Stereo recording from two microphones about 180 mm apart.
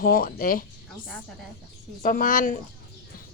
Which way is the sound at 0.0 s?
50° left (ahead or behind).